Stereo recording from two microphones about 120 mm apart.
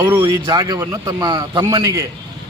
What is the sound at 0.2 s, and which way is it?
A man's voice, 35° right (ahead or behind).